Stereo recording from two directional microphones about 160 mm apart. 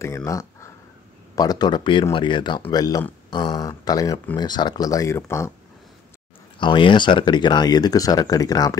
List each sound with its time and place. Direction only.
0.0 s speech: 20° left (ahead or behind)
6.6 s speech: 30° left (ahead or behind)